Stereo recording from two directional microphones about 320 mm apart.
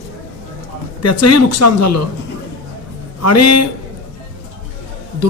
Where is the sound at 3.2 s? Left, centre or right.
Left.